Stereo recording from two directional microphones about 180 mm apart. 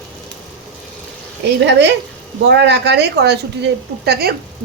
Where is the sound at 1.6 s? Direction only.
75° right (ahead or behind).